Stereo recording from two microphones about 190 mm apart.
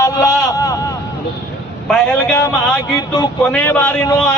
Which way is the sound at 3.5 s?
5° left (ahead or behind).